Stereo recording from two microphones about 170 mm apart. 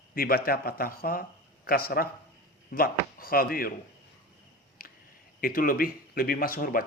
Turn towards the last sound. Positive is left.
turn(degrees=55)  # may be behind; listen again after turning